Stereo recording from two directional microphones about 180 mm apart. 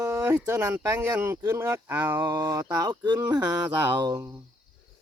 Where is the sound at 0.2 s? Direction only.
10° right (ahead or behind).